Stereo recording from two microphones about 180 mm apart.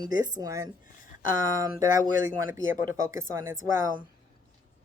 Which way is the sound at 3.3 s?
15° right (ahead or behind).